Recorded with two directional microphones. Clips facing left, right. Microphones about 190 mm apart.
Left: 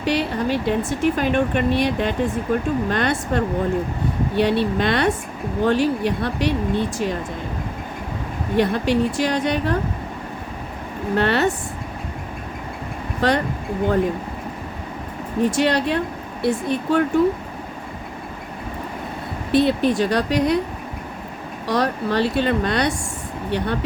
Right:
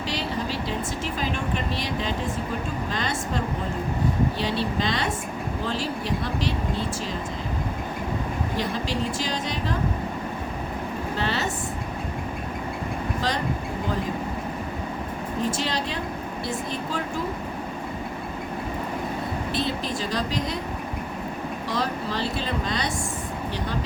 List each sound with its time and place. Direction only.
0.0 s speech: 60° left (ahead or behind)
8.5 s speech: 60° left (ahead or behind)
11.1 s speech: 60° left (ahead or behind)
13.2 s speech: 60° left (ahead or behind)
15.4 s speech: 65° left (ahead or behind)
19.5 s speech: 60° left (ahead or behind)
21.7 s speech: 65° left (ahead or behind)